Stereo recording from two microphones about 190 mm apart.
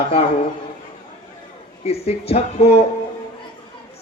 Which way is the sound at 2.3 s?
30° left (ahead or behind).